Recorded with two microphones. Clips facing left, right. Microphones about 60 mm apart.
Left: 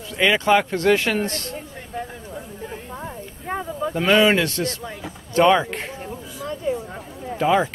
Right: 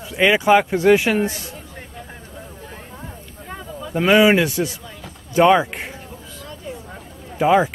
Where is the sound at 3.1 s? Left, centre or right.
Left.